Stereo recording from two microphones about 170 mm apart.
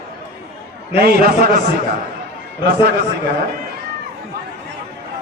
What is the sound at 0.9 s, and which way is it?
Speech, 65° right (ahead or behind).